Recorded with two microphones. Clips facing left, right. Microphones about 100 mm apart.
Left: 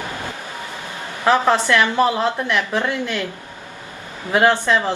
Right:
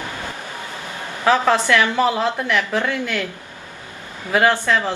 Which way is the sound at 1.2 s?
15° left (ahead or behind).